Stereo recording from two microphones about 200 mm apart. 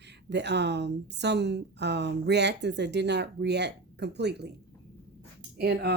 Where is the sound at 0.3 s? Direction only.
60° right (ahead or behind).